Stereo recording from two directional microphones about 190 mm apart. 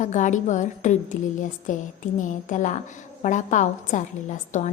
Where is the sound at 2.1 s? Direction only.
40° left (ahead or behind).